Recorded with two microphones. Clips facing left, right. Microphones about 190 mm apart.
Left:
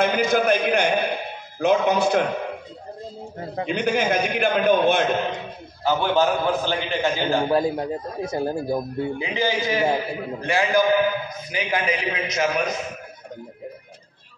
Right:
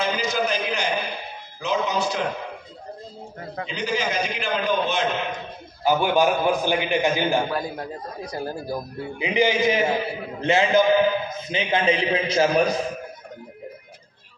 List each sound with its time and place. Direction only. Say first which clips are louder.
0.0 s a sound: left 5 dB; 55° left (ahead or behind)
3.6 s a man's voice: left 5 dB; 55° left (ahead or behind)
5.9 s a man's voice: right 1 dB; 10° right (ahead or behind)
7.4 s a man's voice: left 7 dB; 25° left (ahead or behind)
9.2 s a man's voice: right 8 dB; 20° right (ahead or behind)